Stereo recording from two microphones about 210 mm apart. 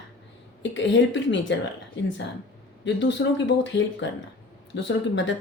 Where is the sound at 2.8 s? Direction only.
60° left (ahead or behind).